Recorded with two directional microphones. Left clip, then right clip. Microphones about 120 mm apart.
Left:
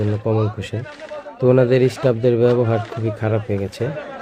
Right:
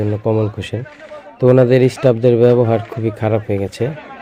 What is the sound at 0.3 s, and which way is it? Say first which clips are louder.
A man's voice: right 4 dB; 35° right (ahead or behind).